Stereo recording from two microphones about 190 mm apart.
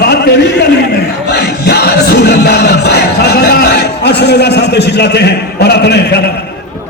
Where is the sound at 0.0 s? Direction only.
60° left (ahead or behind).